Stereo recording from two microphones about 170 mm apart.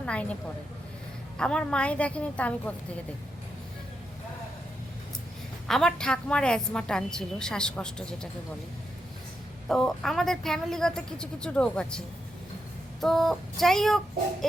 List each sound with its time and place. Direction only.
0.0 s a sound: 5° left (ahead or behind)
1.4 s a woman's voice: 5° left (ahead or behind)
5.6 s a woman's voice: centre (ahead or behind)
9.6 s a woman's voice: centre (ahead or behind)